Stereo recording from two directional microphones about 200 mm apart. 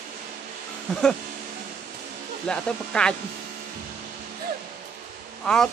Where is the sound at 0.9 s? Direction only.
5° left (ahead or behind).